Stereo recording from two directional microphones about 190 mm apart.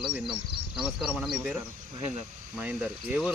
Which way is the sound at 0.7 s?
5° right (ahead or behind).